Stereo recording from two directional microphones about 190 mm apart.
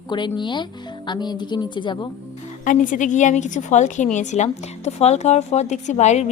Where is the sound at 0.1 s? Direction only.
25° left (ahead or behind).